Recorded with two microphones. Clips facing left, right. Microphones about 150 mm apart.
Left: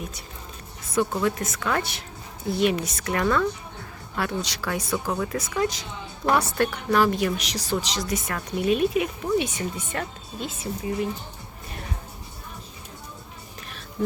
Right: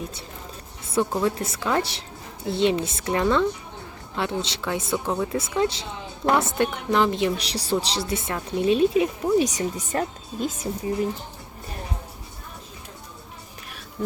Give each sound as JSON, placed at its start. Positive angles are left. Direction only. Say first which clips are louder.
{"t": 0.9, "sound": "a woman's voice", "louder": "right 1 dB", "side_deg": -30}
{"t": 5.4, "sound": "a woman's voice", "louder": "right 2 dB", "side_deg": -25}